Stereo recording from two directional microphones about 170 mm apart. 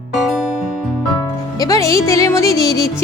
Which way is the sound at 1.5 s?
20° left (ahead or behind).